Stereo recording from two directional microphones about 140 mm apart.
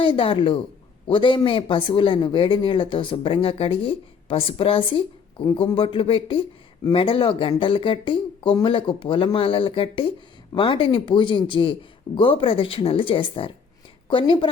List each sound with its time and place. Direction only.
0.0 s speech: 40° left (ahead or behind)